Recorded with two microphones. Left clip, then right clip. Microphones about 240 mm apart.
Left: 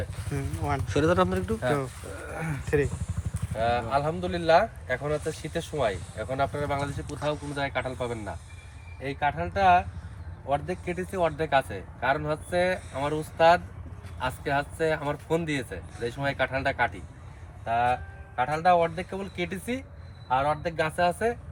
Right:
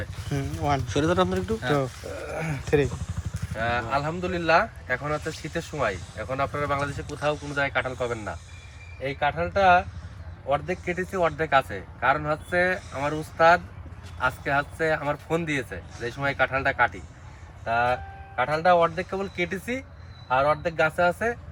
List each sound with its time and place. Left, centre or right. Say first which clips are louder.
0.3 s speech: right 5 dB; right
0.9 s speech: left 3 dB; centre
1.7 s speech: right 4 dB; right
3.6 s speech: even; centre